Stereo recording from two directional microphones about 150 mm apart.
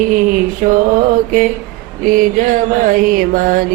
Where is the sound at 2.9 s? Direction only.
65° right (ahead or behind).